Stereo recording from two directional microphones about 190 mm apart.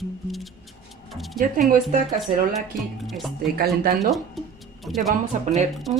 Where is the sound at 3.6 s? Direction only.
55° right (ahead or behind).